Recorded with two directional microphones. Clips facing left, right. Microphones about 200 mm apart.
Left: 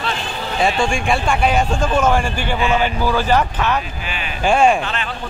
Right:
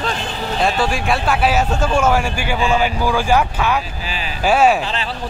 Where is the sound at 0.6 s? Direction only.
Centre (ahead or behind).